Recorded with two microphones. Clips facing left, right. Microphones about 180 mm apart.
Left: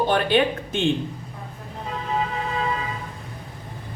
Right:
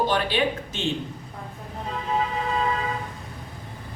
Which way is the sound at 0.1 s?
55° left (ahead or behind).